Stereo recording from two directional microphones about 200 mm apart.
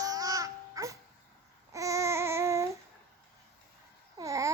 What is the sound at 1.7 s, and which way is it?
Babbling, 15° right (ahead or behind).